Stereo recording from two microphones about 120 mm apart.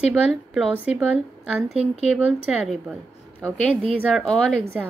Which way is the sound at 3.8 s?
50° right (ahead or behind).